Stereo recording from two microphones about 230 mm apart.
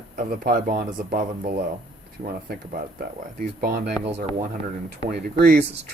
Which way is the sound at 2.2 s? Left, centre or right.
Right.